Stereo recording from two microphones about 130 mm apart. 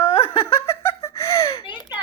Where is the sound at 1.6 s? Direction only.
35° left (ahead or behind).